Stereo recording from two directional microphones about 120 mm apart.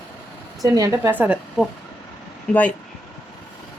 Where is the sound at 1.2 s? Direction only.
10° right (ahead or behind).